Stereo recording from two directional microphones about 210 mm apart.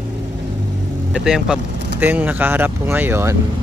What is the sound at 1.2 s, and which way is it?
Speech, 5° right (ahead or behind).